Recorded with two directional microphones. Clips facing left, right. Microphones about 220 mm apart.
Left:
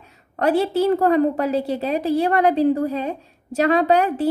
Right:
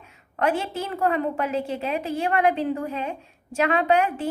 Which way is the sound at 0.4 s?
35° left (ahead or behind).